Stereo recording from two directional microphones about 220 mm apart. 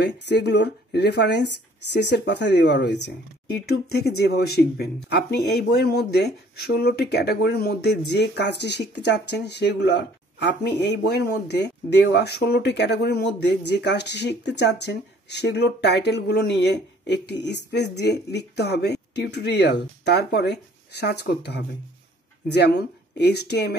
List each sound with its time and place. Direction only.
0.0 s speech: 50° left (ahead or behind)